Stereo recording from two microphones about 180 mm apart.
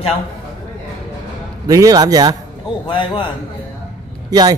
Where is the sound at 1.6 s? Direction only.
20° right (ahead or behind).